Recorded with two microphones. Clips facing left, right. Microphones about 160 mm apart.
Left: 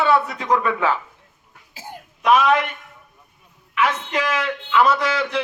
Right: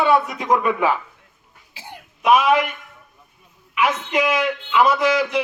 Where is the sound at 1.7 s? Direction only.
45° left (ahead or behind).